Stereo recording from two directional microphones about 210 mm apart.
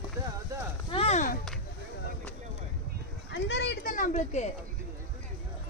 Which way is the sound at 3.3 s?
55° left (ahead or behind).